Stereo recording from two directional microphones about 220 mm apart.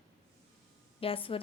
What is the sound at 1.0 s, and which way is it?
Speech, 25° left (ahead or behind).